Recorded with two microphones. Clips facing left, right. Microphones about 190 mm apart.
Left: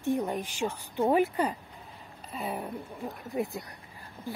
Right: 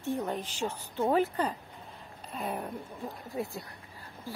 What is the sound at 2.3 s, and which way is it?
Speech, centre (ahead or behind).